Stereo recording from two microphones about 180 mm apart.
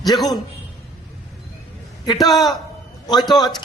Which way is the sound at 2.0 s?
25° left (ahead or behind).